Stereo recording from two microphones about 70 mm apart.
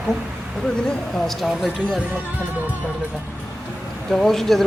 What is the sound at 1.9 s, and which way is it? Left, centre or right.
Speech, centre.